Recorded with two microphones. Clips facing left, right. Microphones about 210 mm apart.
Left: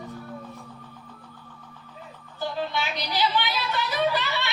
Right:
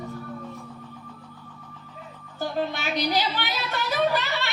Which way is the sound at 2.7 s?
50° right (ahead or behind).